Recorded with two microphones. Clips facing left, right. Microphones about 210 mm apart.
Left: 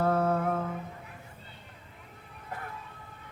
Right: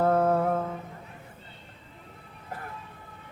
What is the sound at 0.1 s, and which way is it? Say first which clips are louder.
Mantra: right 4 dB; 40° right (ahead or behind).